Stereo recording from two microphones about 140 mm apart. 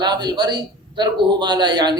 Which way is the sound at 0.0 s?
30° right (ahead or behind).